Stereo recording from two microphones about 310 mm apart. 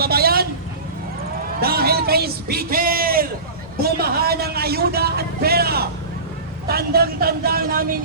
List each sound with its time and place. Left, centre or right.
0.0 s vehicle: right
1.6 s a sound: right
3.8 s a woman's voice: right